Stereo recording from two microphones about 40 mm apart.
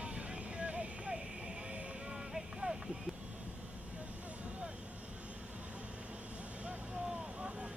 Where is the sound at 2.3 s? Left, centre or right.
Centre.